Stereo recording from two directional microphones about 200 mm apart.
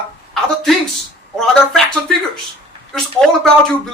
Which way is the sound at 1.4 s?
5° left (ahead or behind).